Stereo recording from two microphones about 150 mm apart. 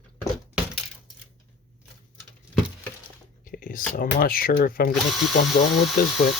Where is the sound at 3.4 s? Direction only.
65° left (ahead or behind).